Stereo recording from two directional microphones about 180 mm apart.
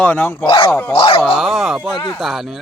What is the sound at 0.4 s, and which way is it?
Speech, 30° left (ahead or behind).